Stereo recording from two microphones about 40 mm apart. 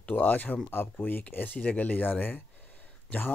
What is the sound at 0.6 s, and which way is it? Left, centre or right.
Speech, left.